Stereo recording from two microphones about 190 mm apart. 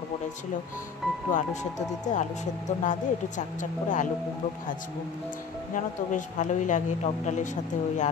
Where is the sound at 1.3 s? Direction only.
40° left (ahead or behind).